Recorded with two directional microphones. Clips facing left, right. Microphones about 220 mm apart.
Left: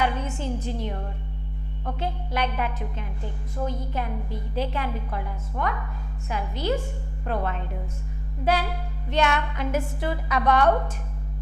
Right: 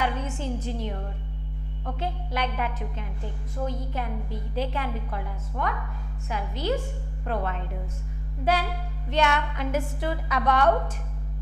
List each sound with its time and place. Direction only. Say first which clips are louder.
0.0 s a woman's voice: left 2 dB; 15° left (ahead or behind)